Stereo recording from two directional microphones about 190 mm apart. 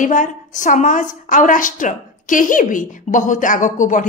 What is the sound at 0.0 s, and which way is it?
A woman's voice, 40° left (ahead or behind).